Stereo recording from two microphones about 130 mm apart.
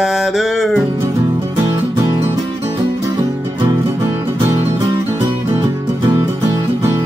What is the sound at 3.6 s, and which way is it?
Music, 25° right (ahead or behind).